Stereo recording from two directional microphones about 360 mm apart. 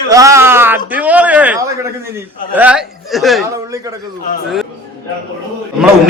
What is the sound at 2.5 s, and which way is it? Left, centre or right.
Speech, centre.